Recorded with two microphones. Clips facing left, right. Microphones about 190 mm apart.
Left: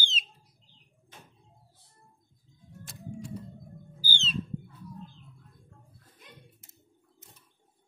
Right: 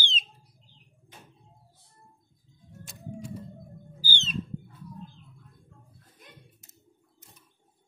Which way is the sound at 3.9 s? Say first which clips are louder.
Right 1 dB; 15° right (ahead or behind).